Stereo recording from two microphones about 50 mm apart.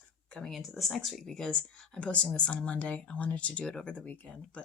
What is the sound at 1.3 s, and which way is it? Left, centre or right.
Speech, centre.